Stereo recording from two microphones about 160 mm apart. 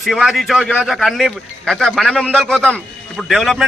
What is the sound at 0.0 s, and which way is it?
A man's voice, centre (ahead or behind).